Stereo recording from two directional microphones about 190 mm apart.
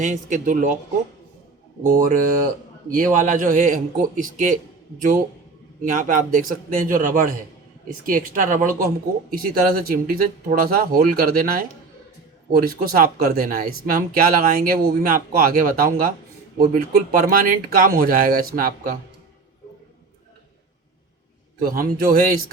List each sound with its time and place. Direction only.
0.0 s speech: 40° right (ahead or behind)
1.8 s speech: 45° right (ahead or behind)
5.8 s speech: 45° right (ahead or behind)
21.6 s speech: 50° right (ahead or behind)